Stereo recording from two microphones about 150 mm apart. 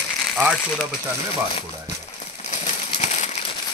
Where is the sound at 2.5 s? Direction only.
50° left (ahead or behind).